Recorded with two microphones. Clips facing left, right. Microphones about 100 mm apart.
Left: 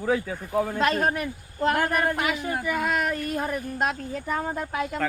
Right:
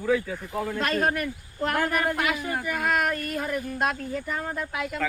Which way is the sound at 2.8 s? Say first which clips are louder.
Even; 50° right (ahead or behind).